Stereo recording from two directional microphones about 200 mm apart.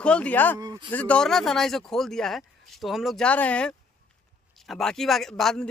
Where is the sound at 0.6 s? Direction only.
20° right (ahead or behind).